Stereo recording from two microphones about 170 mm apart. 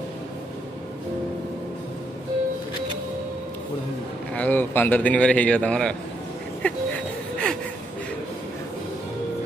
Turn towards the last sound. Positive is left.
turn(degrees=5)  # may be behind; listen again after turning